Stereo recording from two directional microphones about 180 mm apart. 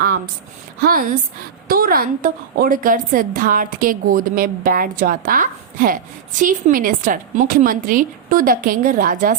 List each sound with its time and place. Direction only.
0.8 s a woman's voice: 55° right (ahead or behind)